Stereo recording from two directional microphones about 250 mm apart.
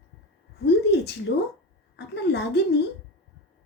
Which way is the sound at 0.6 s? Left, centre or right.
Left.